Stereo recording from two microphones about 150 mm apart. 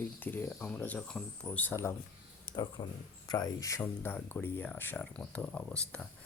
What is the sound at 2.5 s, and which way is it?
Speech, 30° left (ahead or behind).